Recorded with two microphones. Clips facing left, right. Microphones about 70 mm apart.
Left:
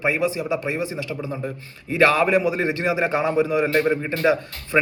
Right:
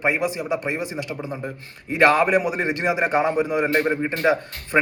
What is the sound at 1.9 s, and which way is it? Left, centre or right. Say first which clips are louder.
A man's voice: right 1 dB; right.